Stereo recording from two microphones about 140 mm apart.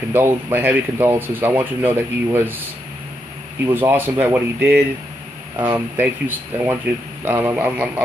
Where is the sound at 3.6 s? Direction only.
15° right (ahead or behind).